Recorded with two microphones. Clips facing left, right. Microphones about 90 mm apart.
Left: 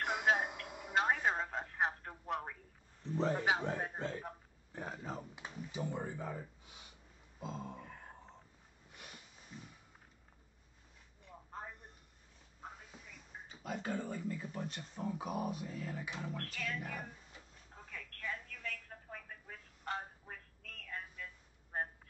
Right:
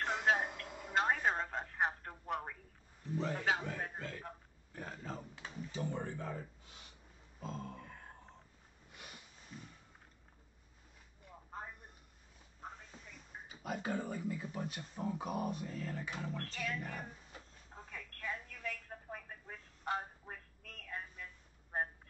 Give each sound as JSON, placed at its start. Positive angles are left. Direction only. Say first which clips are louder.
{"t": 0.0, "sound": "a sound", "louder": "even", "side_deg": 15}
{"t": 0.9, "sound": "telephone", "louder": "even", "side_deg": 0}
{"t": 3.2, "sound": "a man's voice", "louder": "left 3 dB", "side_deg": 35}
{"t": 7.3, "sound": "music", "louder": "left 1 dB", "side_deg": 10}
{"t": 8.9, "sound": "sniff", "louder": "even", "side_deg": 0}
{"t": 12.9, "sound": "speech", "louder": "even", "side_deg": 0}
{"t": 17.9, "sound": "telephone", "louder": "even", "side_deg": -15}